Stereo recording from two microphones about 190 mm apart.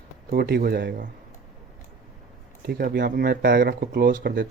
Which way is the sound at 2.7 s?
50° right (ahead or behind).